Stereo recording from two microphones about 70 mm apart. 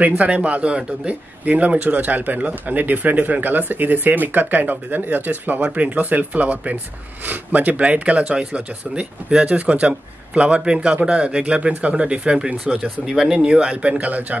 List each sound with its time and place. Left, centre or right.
0.0 s speech: right